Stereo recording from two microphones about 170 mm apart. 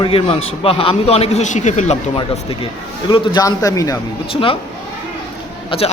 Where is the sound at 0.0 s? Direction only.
30° left (ahead or behind).